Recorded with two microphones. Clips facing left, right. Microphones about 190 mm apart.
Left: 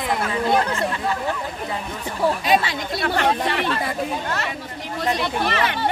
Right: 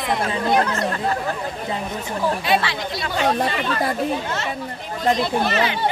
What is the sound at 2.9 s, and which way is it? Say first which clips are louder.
Speech: left 3 dB; 60° left (ahead or behind).